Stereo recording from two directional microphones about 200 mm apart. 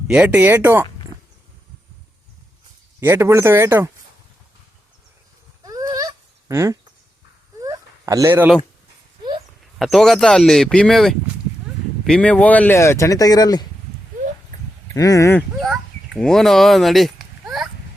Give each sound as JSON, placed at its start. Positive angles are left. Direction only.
{"t": 0.1, "sound": "speech", "side_deg": -5}
{"t": 3.0, "sound": "speech", "side_deg": -10}
{"t": 5.6, "sound": "a sound", "side_deg": -20}
{"t": 9.7, "sound": "speech", "side_deg": 0}
{"t": 14.9, "sound": "speech", "side_deg": 15}
{"t": 15.4, "sound": "a sound", "side_deg": 0}